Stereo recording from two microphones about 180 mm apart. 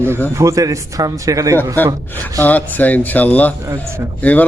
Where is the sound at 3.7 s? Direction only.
15° right (ahead or behind).